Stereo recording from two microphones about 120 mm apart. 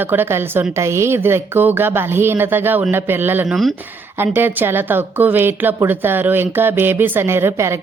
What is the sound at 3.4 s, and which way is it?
Speech, centre (ahead or behind).